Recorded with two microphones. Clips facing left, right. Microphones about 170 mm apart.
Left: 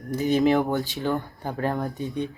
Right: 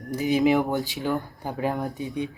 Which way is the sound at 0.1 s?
10° right (ahead or behind).